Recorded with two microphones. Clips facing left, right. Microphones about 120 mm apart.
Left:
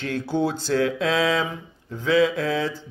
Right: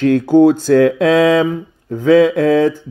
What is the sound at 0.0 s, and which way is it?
Mantra, 50° right (ahead or behind).